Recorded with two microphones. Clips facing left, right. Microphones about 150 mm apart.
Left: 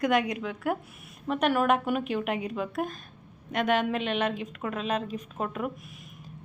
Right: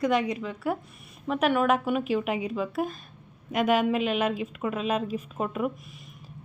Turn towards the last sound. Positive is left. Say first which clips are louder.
# right 3 dB
turn(degrees=-5)  # may be behind; listen again after turning